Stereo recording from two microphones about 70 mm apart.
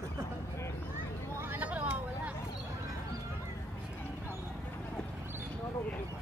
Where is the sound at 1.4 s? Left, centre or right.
Right.